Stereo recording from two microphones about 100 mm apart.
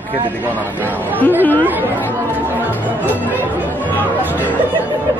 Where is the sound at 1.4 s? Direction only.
15° left (ahead or behind).